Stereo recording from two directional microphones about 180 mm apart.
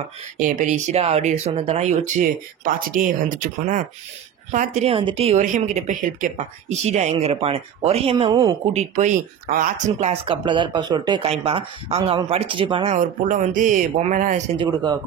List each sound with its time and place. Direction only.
0.4 s a woman's voice: 45° right (ahead or behind); by 8.5 s 25° right (ahead or behind)
8.7 s a woman's voice: 40° right (ahead or behind)
12.9 s speech: 45° right (ahead or behind)
14.6 s speech: 25° right (ahead or behind)